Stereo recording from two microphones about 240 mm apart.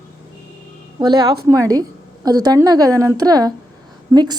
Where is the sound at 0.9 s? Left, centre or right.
Centre.